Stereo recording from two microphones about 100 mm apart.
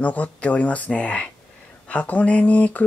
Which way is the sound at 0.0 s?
15° left (ahead or behind).